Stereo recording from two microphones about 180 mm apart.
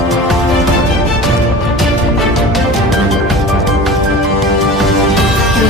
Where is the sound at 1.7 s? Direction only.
Centre (ahead or behind).